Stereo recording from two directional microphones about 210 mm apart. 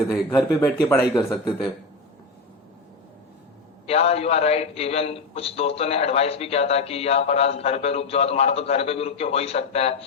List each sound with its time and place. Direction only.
0.1 s speech: 10° left (ahead or behind)
3.8 s a man's voice: 30° left (ahead or behind)